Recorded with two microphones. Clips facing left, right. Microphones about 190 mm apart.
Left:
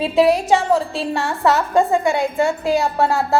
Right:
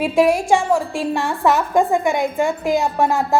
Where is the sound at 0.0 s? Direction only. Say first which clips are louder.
Left 1 dB; 15° right (ahead or behind).